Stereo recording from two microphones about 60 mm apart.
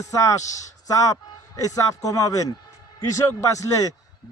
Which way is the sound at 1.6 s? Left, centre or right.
Left.